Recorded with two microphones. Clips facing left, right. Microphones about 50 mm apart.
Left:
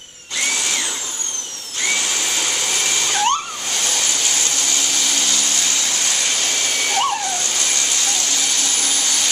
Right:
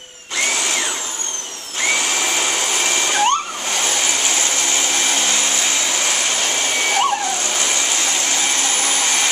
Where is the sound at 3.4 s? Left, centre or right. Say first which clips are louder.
Right 3 dB; right.